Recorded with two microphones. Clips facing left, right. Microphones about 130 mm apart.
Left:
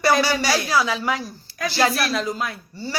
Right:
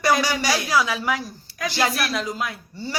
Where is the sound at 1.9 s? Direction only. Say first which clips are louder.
Left 2 dB; 30° left (ahead or behind).